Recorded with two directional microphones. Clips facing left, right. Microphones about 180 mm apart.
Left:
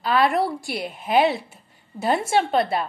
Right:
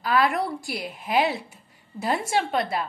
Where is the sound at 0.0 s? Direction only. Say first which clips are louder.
Left 3 dB; 25° left (ahead or behind).